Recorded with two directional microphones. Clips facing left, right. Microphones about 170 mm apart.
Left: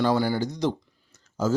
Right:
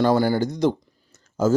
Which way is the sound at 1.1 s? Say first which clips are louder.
Right 5 dB; 50° right (ahead or behind).